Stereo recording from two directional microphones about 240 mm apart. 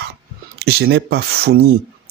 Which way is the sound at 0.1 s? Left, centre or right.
Right.